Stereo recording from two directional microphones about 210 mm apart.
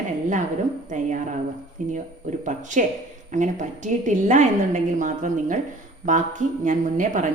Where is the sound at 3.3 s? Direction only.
35° right (ahead or behind).